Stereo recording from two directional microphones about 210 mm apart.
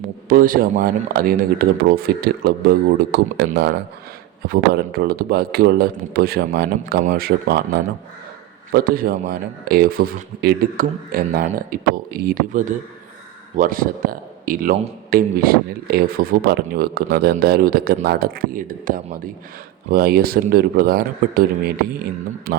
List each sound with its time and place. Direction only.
0.3 s speech: 40° right (ahead or behind)
8.7 s speech: 45° right (ahead or behind)